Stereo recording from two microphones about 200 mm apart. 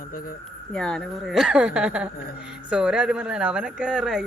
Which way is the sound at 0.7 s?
5° left (ahead or behind).